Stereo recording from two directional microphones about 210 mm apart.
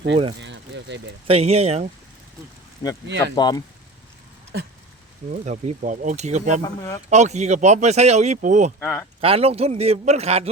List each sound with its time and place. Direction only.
0.3 s vehicle: 55° right (ahead or behind)
1.3 s a man's voice: 30° right (ahead or behind)
3.1 s speech: 55° right (ahead or behind)
3.3 s speech: 20° left (ahead or behind)
5.5 s speech: 35° right (ahead or behind)
6.6 s speech: 15° left (ahead or behind)
7.1 s speech: 35° right (ahead or behind)
8.8 s speech: 10° left (ahead or behind)
9.2 s a man's voice: 30° right (ahead or behind)